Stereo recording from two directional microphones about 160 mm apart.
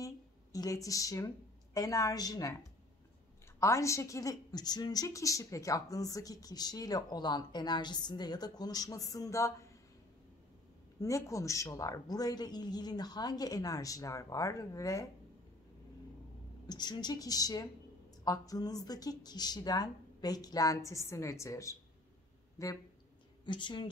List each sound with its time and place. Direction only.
0.0 s a woman's voice: 20° left (ahead or behind)
3.5 s speech: 20° left (ahead or behind)
11.0 s speech: 20° left (ahead or behind)
16.6 s speech: 25° left (ahead or behind)